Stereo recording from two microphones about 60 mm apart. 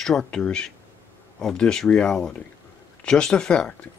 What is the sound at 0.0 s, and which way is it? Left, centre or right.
Speech, centre.